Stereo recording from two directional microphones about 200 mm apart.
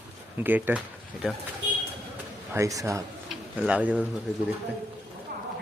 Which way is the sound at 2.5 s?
15° right (ahead or behind).